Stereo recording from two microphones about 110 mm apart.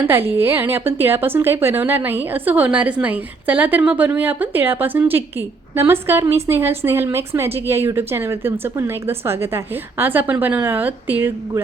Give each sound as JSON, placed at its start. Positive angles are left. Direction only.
{"t": 0.0, "sound": "a woman's voice", "side_deg": -20}